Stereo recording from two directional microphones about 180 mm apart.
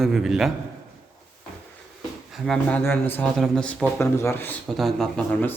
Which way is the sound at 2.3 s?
Centre (ahead or behind).